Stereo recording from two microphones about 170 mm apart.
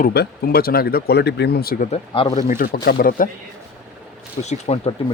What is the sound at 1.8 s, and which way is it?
Speech, 35° left (ahead or behind).